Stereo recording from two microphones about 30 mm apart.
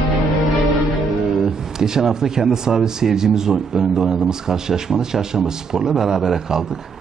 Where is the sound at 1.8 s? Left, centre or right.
Centre.